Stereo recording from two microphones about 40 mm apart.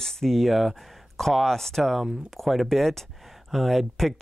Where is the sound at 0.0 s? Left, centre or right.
Centre.